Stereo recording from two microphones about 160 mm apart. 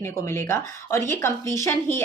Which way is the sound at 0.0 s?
15° left (ahead or behind).